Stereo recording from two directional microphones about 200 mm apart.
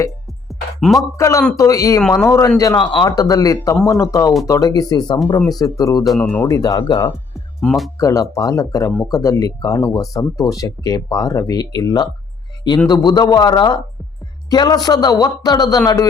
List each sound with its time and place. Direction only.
0.4 s music: centre (ahead or behind)
1.1 s a man's voice: 15° left (ahead or behind)
6.6 s a man's voice: 20° left (ahead or behind)
7.6 s speech: 5° left (ahead or behind)
7.9 s a man's voice: 15° left (ahead or behind)